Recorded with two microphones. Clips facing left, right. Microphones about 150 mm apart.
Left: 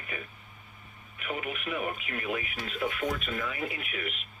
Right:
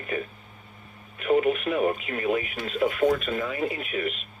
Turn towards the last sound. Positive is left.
turn(degrees=-35)  # may be behind; listen again after turning